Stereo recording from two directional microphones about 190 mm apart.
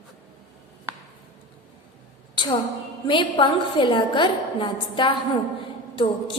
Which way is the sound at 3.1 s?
25° left (ahead or behind).